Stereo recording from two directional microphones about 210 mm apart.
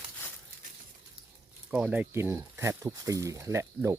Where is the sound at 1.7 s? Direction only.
5° right (ahead or behind).